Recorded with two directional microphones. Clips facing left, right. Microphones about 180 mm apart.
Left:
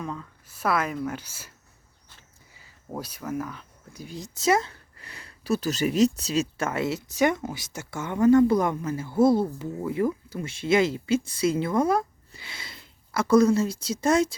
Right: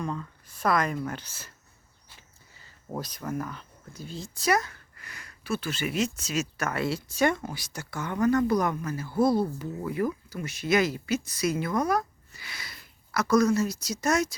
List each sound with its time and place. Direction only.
0.0 s speech: centre (ahead or behind)
2.6 s speech: 10° left (ahead or behind)
3.9 s speech: 15° left (ahead or behind)